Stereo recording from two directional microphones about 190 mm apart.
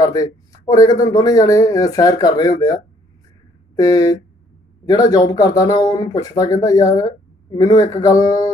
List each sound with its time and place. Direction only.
0.0 s speech: 20° left (ahead or behind)